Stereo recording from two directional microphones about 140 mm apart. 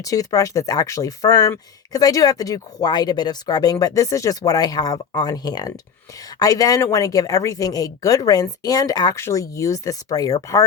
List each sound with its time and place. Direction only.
0.0 s speech: 25° left (ahead or behind)